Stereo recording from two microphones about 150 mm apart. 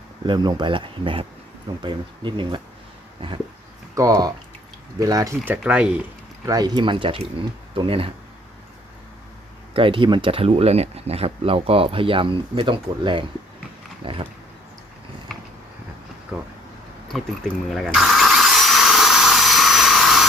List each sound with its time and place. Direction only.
0.3 s speech: 30° right (ahead or behind)
3.2 s a sound: 35° right (ahead or behind)
3.9 s speech: 25° right (ahead or behind)
5.5 s speech: 5° right (ahead or behind)
6.4 s speech: 25° right (ahead or behind)
9.7 s speech: 35° right (ahead or behind)
16.3 s speech: 10° right (ahead or behind)
17.1 s speech: centre (ahead or behind)
17.7 s drill: centre (ahead or behind)